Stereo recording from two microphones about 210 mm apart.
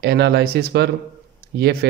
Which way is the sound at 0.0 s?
50° right (ahead or behind).